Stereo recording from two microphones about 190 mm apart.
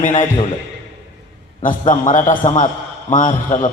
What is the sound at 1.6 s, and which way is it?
A man's voice, 40° left (ahead or behind).